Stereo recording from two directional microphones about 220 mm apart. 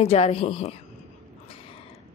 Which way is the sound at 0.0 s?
30° left (ahead or behind).